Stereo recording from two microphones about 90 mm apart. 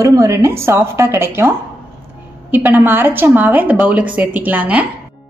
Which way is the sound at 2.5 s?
20° right (ahead or behind).